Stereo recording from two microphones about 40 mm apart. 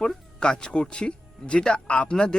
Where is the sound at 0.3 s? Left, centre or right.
Left.